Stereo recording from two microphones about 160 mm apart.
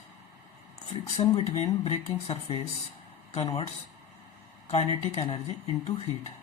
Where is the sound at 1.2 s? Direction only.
35° left (ahead or behind).